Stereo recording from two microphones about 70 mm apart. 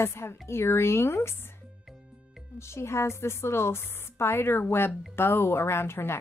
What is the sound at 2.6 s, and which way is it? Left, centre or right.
Speech, left.